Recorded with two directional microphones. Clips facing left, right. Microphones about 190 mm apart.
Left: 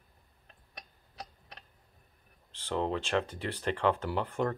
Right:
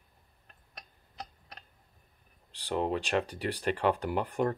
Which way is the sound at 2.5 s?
15° right (ahead or behind).